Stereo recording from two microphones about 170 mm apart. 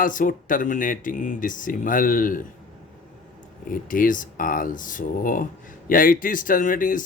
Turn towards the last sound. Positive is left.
turn(degrees=50)  # may be behind; listen again after turning